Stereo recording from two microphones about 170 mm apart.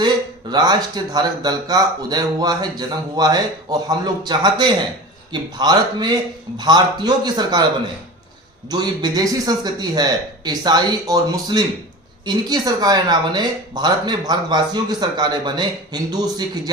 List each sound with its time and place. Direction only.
0.5 s speech: 25° right (ahead or behind)
8.7 s speech: 25° right (ahead or behind)